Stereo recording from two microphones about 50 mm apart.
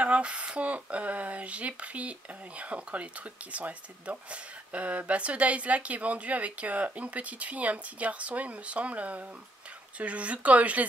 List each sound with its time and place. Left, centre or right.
0.0 s speech: right